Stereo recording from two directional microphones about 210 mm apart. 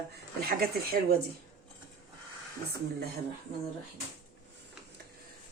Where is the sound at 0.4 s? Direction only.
45° right (ahead or behind).